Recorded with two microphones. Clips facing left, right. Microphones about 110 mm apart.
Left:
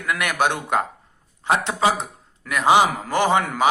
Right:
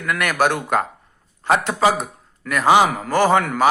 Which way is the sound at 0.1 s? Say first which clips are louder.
Right 2 dB; 20° left (ahead or behind).